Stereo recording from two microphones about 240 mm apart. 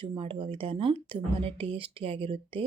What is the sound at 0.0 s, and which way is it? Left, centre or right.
Speech, right.